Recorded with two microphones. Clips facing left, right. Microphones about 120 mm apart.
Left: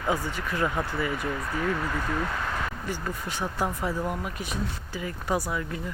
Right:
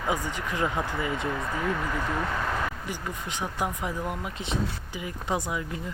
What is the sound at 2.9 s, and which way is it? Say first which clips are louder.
Speech: left 2 dB; 15° right (ahead or behind).